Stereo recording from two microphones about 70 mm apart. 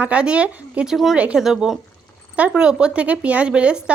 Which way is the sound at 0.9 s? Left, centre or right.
Centre.